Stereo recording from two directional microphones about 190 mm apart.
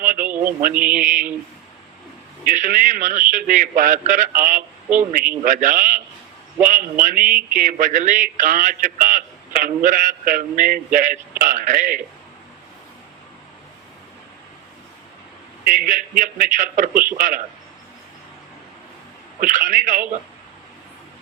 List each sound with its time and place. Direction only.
0.0 s a sound: 45° right (ahead or behind)
0.7 s mantra: 5° right (ahead or behind)
2.4 s a man's voice: 45° right (ahead or behind)
15.6 s a man's voice: 45° right (ahead or behind)
19.4 s a man's voice: 45° right (ahead or behind)